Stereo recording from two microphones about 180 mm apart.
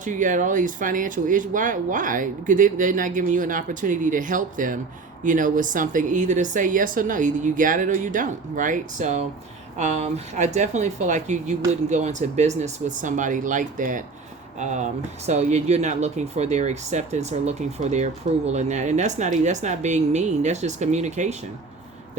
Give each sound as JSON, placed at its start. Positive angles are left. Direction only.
{"t": 0.0, "sound": "speech", "side_deg": -45}